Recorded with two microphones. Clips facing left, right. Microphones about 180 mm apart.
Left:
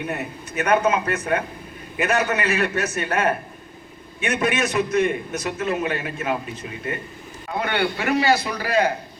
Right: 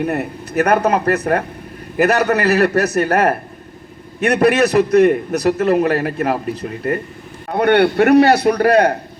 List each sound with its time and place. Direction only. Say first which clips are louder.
0.1 s a man's voice: right 8 dB; 60° right (ahead or behind)